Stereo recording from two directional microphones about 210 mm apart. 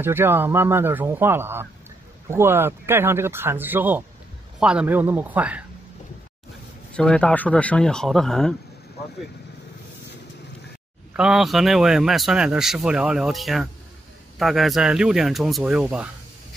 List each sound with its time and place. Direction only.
0.0 s a man's voice: 10° right (ahead or behind)
6.9 s speech: 5° left (ahead or behind)
11.1 s speech: centre (ahead or behind)